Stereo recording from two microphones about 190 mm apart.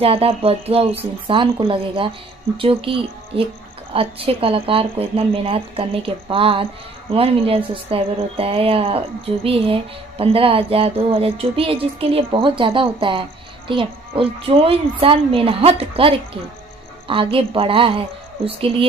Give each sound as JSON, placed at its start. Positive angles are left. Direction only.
{"t": 0.0, "sound": "a woman's voice", "side_deg": -30}